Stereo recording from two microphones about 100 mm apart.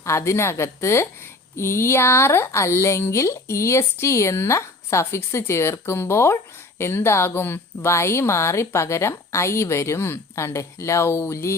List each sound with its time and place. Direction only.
0.0 s speech: 30° left (ahead or behind)